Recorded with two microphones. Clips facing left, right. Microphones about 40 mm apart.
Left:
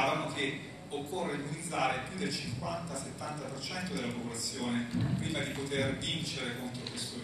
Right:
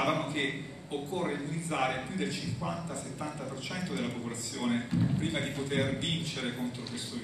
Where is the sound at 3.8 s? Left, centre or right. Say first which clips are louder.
Right 3 dB; right.